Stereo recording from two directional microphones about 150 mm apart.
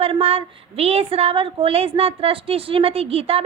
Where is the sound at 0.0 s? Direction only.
40° right (ahead or behind).